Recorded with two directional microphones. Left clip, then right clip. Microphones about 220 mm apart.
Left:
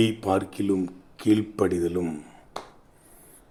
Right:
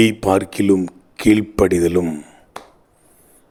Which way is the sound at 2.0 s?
25° right (ahead or behind).